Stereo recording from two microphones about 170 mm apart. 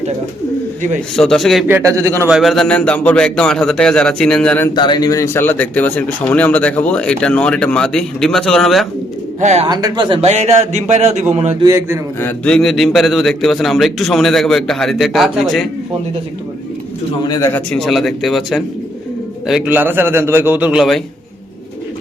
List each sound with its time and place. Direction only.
1.1 s a man's voice: 5° left (ahead or behind); by 2.3 s 15° right (ahead or behind)
2.3 s a man's voice: centre (ahead or behind)
4.7 s speech: 25° left (ahead or behind); by 8.9 s centre (ahead or behind)
9.4 s a man's voice: 40° right (ahead or behind)
9.6 s a man's voice: 25° right (ahead or behind); by 11.5 s 40° right (ahead or behind)
11.6 s a man's voice: 15° right (ahead or behind)
12.2 s a man's voice: 5° left (ahead or behind)
17.2 s a man's voice: 25° left (ahead or behind)
17.5 s a man's voice: 5° left (ahead or behind)